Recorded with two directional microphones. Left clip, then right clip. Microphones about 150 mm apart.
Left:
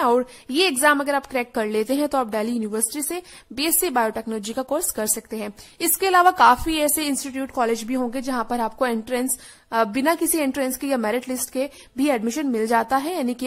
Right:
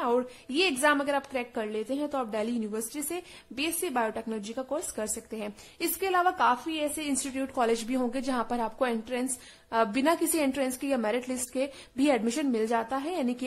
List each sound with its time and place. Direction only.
0.0 s a woman's voice: 30° left (ahead or behind)
2.3 s a woman's voice: 25° left (ahead or behind)
7.2 s a woman's voice: 20° left (ahead or behind)